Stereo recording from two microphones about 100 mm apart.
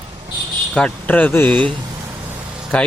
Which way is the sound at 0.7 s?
15° left (ahead or behind).